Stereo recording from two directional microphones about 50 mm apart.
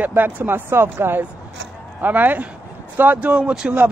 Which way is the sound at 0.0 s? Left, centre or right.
Right.